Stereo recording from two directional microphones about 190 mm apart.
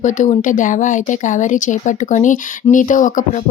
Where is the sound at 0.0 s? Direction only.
40° left (ahead or behind).